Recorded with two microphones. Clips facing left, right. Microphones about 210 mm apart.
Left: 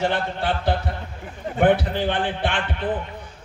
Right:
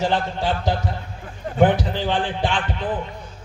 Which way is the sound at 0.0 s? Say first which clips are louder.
Right 1 dB; 60° left (ahead or behind).